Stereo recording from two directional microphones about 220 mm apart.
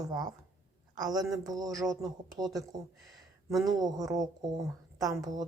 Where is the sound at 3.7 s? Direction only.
15° right (ahead or behind).